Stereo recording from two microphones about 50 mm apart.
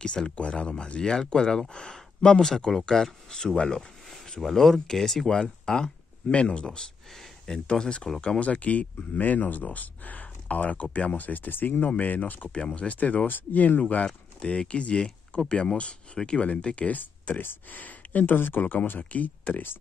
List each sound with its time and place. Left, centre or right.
0.0 s speech: centre
4.1 s speech: centre; by 11.9 s left
11.9 s speech: left
12.5 s speech: left
14.0 s speech: centre